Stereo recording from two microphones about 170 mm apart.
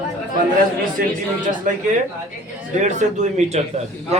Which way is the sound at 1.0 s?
60° right (ahead or behind).